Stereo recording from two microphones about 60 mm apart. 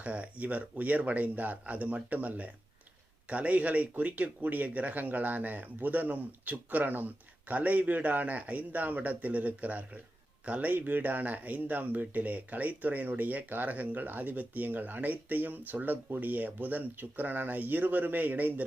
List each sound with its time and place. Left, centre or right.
0.0 s speech: right